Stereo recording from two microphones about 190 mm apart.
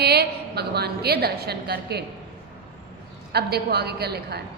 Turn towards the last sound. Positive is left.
turn(degrees=-60)  # may be behind; listen again after turning